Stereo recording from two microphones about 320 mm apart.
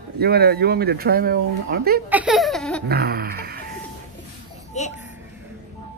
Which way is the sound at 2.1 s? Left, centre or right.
Centre.